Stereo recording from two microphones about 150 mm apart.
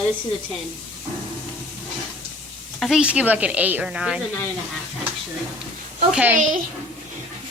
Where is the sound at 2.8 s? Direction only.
5° right (ahead or behind).